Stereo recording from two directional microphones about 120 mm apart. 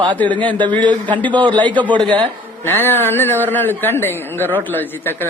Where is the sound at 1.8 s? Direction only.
40° right (ahead or behind).